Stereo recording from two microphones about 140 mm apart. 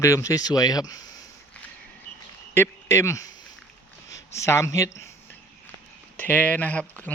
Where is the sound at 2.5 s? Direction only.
20° left (ahead or behind).